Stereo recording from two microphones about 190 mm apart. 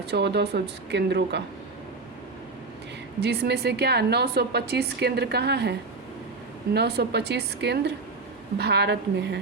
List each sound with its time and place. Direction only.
0.0 s a woman's voice: 60° right (ahead or behind)
3.2 s a woman's voice: 60° right (ahead or behind)
6.7 s a woman's voice: 60° right (ahead or behind)